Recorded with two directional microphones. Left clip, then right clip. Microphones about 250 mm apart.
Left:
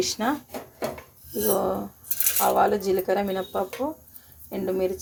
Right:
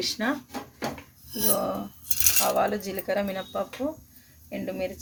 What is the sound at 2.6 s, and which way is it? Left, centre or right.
Speech, centre.